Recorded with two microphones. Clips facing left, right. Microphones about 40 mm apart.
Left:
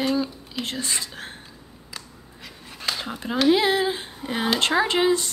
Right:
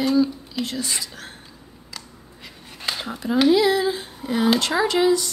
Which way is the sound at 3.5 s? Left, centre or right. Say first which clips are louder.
Right 2 dB; left.